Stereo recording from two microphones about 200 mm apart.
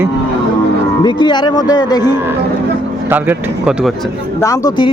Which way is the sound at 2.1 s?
10° right (ahead or behind).